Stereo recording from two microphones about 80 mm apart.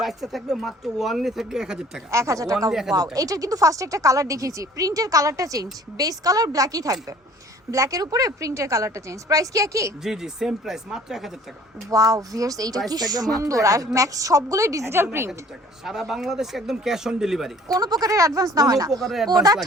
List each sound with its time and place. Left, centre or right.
0.0 s speech: centre
2.0 s speech: right
10.0 s speech: centre
11.9 s a woman's voice: right
13.4 s speech: right
14.9 s a woman's voice: right
15.8 s speech: centre
17.7 s speech: right
19.0 s speech: centre